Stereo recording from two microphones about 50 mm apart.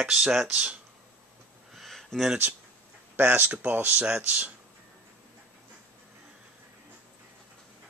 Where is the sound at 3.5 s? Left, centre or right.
Right.